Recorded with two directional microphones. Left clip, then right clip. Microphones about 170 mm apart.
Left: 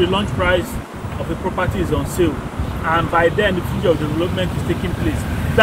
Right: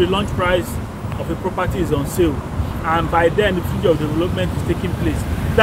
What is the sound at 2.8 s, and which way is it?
Speech, 30° right (ahead or behind).